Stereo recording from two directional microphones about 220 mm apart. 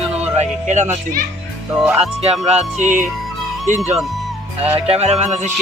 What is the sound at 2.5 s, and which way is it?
Speech, 30° right (ahead or behind).